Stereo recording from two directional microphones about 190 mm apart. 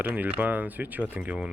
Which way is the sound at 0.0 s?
10° right (ahead or behind).